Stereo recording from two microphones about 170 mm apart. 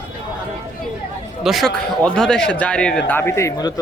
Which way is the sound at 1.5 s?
Centre (ahead or behind).